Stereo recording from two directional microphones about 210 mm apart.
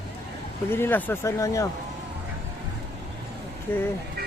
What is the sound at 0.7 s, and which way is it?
Speech, 10° left (ahead or behind).